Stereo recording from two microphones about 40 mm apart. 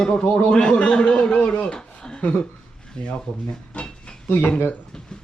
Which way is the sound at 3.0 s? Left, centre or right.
Left.